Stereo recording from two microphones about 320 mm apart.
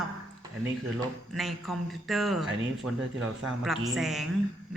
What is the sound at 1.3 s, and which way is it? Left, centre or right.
Speech, centre.